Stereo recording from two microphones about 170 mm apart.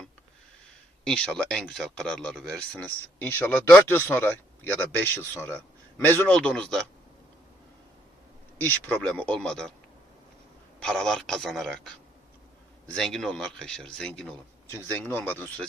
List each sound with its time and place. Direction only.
1.0 s speech: 5° left (ahead or behind)
8.6 s speech: 10° left (ahead or behind)
10.8 s speech: 5° left (ahead or behind)
12.9 s speech: 5° left (ahead or behind)